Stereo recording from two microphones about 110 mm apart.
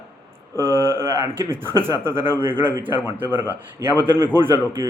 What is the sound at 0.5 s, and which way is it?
Speech, 35° left (ahead or behind).